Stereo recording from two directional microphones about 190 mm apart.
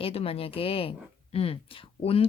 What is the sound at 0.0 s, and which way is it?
Speech, 30° left (ahead or behind).